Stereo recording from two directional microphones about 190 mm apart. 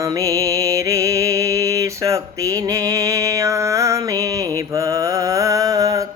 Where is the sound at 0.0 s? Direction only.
15° right (ahead or behind).